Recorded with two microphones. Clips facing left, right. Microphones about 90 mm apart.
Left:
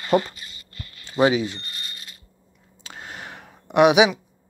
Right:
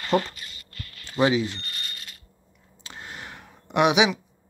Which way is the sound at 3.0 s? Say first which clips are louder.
Left 2 dB; 20° left (ahead or behind).